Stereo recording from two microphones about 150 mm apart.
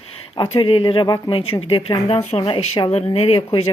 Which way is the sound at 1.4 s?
40° left (ahead or behind).